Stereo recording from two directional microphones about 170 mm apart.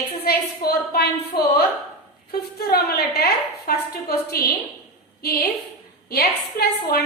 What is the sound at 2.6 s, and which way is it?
A woman's voice, 65° left (ahead or behind).